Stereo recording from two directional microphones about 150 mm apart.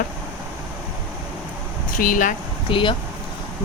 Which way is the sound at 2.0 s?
60° left (ahead or behind).